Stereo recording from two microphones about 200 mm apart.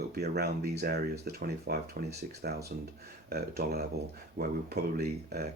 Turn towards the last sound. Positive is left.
turn(degrees=-50)  # may be behind; listen again after turning